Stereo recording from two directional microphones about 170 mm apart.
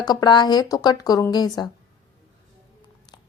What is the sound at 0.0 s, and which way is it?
A woman's voice, 25° left (ahead or behind).